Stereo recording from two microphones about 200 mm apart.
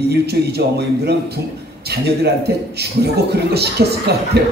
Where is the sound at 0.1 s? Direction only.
55° right (ahead or behind).